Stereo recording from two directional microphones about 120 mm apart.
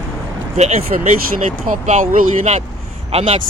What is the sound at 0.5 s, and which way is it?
Speech, 70° right (ahead or behind).